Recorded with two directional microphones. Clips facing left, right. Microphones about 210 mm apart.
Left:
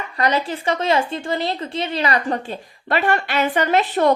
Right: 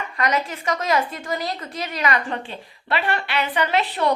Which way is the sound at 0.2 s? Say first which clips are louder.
Left 3 dB; 30° left (ahead or behind).